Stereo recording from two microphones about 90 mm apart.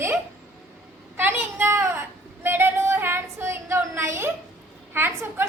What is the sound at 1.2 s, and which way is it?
Speech, 25° right (ahead or behind).